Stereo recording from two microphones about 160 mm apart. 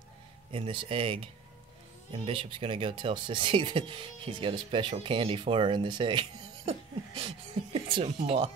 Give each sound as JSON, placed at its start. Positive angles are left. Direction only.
{"t": 0.5, "sound": "speech", "side_deg": -35}